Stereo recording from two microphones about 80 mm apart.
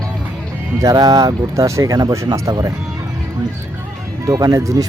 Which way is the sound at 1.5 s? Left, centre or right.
Right.